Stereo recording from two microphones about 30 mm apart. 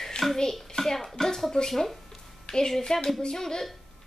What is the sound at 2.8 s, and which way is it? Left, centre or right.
Speech, left.